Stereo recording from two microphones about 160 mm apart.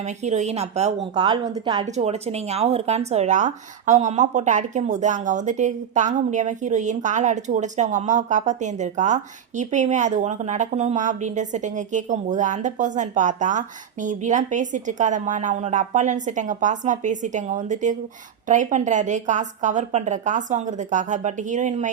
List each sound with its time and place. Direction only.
0.0 s speech: 45° right (ahead or behind)
1.1 s a woman's voice: 25° right (ahead or behind)
2.0 s speech: 40° right (ahead or behind)